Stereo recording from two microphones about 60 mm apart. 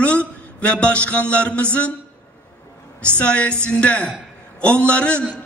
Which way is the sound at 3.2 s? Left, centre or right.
Left.